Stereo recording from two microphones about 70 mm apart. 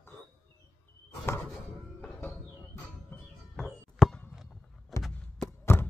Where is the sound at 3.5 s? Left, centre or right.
Centre.